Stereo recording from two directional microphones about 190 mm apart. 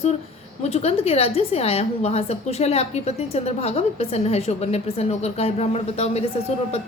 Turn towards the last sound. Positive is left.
turn(degrees=35)  # may be behind; listen again after turning